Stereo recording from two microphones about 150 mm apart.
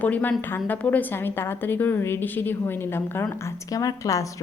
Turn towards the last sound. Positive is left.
turn(degrees=20)  # may be behind; listen again after turning